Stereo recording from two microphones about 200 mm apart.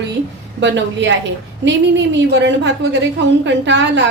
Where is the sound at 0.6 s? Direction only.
65° right (ahead or behind).